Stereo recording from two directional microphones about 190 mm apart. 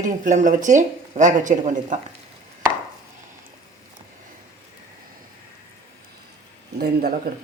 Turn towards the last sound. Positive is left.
turn(degrees=-55)  # may be behind; listen again after turning